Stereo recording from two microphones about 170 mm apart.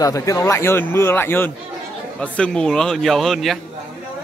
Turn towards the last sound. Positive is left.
turn(degrees=0)  # may be behind; listen again after turning